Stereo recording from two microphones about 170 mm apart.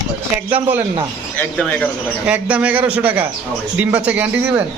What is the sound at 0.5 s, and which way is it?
Speech, 10° right (ahead or behind).